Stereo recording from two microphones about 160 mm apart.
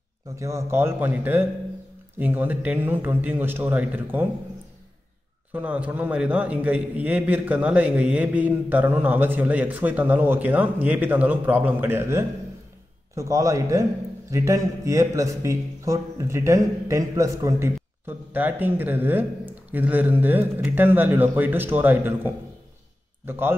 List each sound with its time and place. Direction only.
0.4 s a man's voice: 20° right (ahead or behind)
5.5 s a man's voice: 10° right (ahead or behind)